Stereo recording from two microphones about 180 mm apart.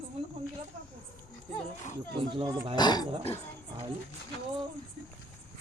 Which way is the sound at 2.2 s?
30° right (ahead or behind).